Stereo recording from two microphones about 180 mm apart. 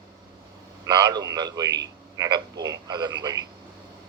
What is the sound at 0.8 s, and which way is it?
A man's voice, 20° right (ahead or behind).